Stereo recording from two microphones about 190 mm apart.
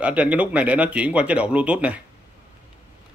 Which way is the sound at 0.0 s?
5° right (ahead or behind).